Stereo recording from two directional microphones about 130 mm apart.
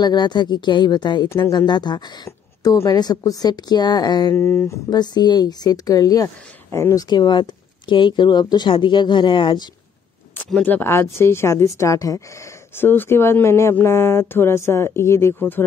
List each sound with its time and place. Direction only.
0.0 s speech: 35° left (ahead or behind)
4.4 s speech: 20° left (ahead or behind)
4.8 s speech: 30° left (ahead or behind)
10.3 s speech: 10° left (ahead or behind)